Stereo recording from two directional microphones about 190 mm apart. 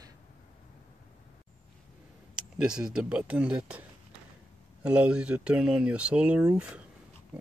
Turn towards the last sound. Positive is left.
turn(degrees=-5)  # may be behind; listen again after turning